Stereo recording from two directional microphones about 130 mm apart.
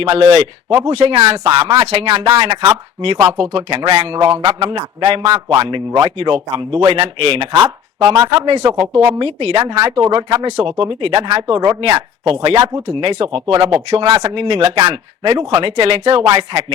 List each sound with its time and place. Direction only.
0.0 s speech: 40° right (ahead or behind)
1.5 s speech: 35° right (ahead or behind)
1.8 s speech: 50° right (ahead or behind)
4.2 s speech: 35° right (ahead or behind)
8.2 s speech: 30° right (ahead or behind)
8.8 s speech: 50° right (ahead or behind)
14.8 s speech: 35° right (ahead or behind)